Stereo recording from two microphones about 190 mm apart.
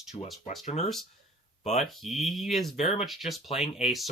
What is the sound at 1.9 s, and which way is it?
Speech, centre (ahead or behind).